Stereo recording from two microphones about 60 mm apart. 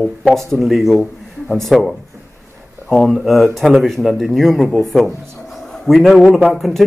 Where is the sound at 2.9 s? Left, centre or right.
Centre.